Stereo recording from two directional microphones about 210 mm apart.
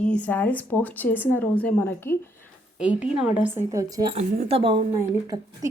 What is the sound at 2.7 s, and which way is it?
A woman's voice, 5° right (ahead or behind).